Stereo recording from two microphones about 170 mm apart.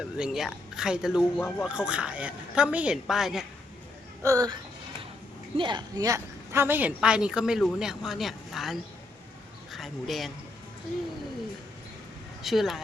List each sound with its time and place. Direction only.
0.0 s speech: 5° right (ahead or behind)
1.4 s speech: 10° left (ahead or behind)
1.6 s speech: 5° right (ahead or behind)
4.2 s speech: 20° right (ahead or behind)
5.5 s speech: 25° right (ahead or behind); by 10.3 s centre (ahead or behind)
12.4 s speech: centre (ahead or behind)